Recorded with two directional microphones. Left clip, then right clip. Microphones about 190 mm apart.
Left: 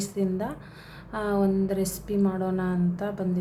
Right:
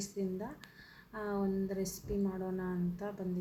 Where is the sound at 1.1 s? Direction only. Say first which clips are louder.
Left 11 dB; 5° right (ahead or behind).